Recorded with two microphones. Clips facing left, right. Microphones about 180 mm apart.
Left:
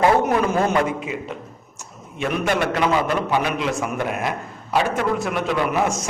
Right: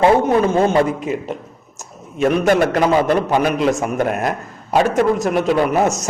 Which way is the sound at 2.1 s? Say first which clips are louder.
Right 7 dB; 40° right (ahead or behind).